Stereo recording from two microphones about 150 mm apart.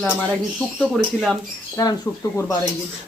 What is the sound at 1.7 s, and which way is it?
Speech, 25° left (ahead or behind).